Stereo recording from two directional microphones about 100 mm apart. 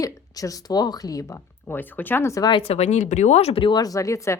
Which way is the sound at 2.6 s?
90° left.